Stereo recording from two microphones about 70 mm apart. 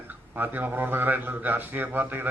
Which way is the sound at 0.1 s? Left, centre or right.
Right.